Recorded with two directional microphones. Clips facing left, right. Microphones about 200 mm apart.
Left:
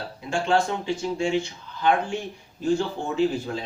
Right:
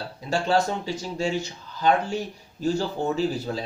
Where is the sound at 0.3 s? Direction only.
40° right (ahead or behind).